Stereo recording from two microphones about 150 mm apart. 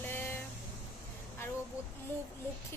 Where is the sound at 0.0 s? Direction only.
15° left (ahead or behind).